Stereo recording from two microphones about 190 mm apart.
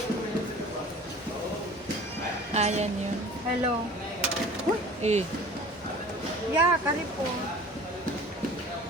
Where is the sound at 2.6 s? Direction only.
35° right (ahead or behind).